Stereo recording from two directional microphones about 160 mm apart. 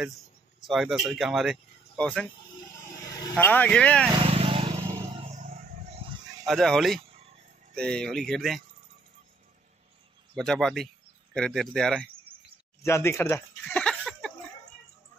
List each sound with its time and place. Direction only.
0.7 s speech: centre (ahead or behind)
2.7 s vehicle: 20° left (ahead or behind)
3.4 s speech: 10° left (ahead or behind)
4.2 s vehicle: 35° right (ahead or behind)
5.3 s a sound: 55° right (ahead or behind)
6.0 s a sound: 35° right (ahead or behind)
6.4 s speech: centre (ahead or behind)
10.3 s speech: 5° left (ahead or behind)
12.8 s speech: 15° left (ahead or behind)